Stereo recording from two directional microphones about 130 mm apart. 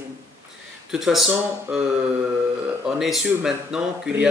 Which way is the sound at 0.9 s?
5° right (ahead or behind).